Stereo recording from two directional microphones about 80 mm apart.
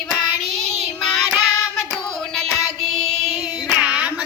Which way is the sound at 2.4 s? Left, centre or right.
Centre.